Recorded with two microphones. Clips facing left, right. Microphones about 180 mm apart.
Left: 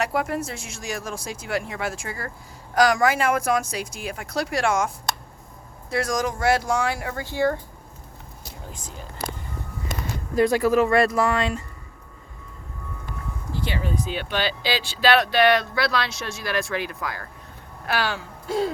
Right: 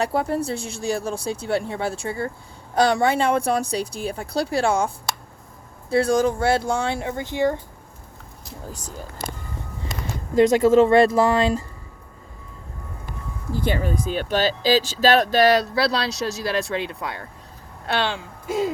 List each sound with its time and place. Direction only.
0.0 s speech: 30° right (ahead or behind)
5.9 s speech: 30° right (ahead or behind)
8.6 s speech: 40° right (ahead or behind)
10.3 s speech: 20° right (ahead or behind)
13.5 s speech: 45° right (ahead or behind); by 18.7 s 20° right (ahead or behind)